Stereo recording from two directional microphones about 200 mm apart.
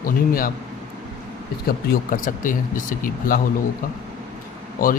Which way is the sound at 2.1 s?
40° left (ahead or behind).